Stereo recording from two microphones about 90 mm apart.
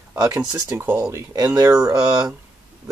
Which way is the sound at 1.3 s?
40° right (ahead or behind).